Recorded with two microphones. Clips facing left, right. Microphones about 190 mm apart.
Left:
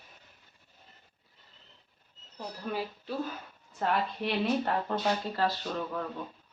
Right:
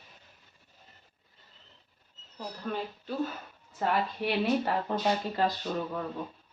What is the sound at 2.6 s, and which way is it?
Speech, 5° left (ahead or behind).